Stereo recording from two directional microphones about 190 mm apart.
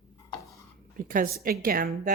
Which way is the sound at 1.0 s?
45° right (ahead or behind).